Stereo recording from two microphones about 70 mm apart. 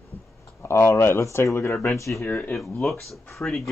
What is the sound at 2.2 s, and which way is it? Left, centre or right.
Speech, left.